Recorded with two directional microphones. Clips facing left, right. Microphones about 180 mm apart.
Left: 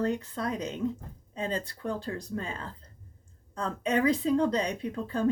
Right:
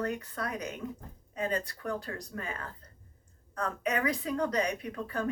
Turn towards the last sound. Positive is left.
turn(degrees=30)  # may be behind; listen again after turning